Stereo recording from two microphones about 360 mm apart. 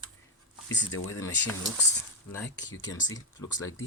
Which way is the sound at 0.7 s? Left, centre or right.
Left.